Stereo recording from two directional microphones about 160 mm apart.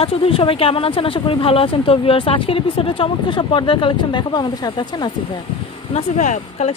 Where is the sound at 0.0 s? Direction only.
35° left (ahead or behind).